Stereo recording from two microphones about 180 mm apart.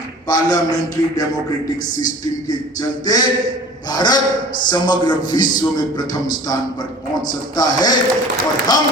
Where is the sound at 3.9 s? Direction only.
20° left (ahead or behind).